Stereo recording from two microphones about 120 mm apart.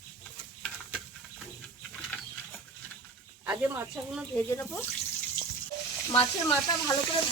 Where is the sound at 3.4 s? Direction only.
15° right (ahead or behind).